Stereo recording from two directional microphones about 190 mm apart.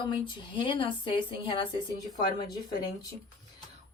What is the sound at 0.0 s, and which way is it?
Speech, 25° left (ahead or behind).